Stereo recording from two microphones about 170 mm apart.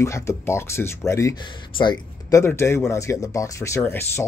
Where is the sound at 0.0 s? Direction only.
15° left (ahead or behind).